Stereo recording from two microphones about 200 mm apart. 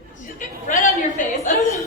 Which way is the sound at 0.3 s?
40° left (ahead or behind).